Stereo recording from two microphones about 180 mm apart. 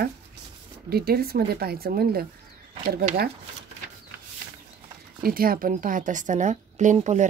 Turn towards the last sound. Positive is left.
turn(degrees=-40)  # may be behind; listen again after turning